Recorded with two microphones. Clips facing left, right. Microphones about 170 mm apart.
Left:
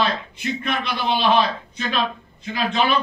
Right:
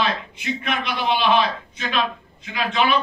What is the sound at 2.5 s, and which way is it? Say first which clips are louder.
Speech: even; 35° left (ahead or behind).